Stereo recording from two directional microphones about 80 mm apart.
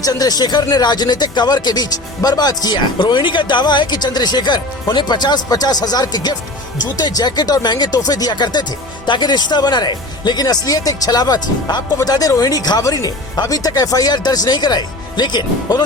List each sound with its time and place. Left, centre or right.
0.0 s speech: left